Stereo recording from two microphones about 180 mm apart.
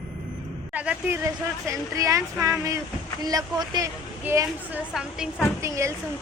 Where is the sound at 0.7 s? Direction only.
10° right (ahead or behind).